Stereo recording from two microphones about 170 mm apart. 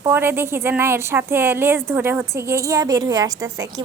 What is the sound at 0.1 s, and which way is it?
A woman's voice, 15° right (ahead or behind).